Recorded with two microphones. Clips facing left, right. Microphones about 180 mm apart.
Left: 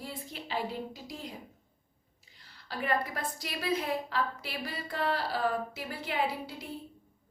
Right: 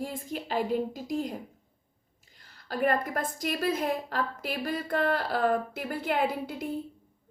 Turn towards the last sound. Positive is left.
turn(degrees=-50)  # may be behind; listen again after turning